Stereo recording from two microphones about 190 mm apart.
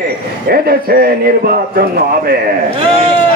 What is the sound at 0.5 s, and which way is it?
A man's voice, 55° right (ahead or behind).